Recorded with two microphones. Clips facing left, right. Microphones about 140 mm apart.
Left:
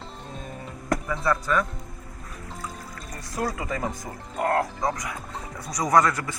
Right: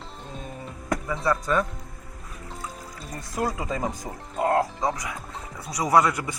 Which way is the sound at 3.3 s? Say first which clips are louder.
Right 1 dB; 15° right (ahead or behind).